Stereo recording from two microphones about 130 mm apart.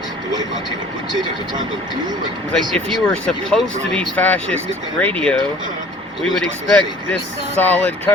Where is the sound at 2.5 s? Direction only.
5° left (ahead or behind).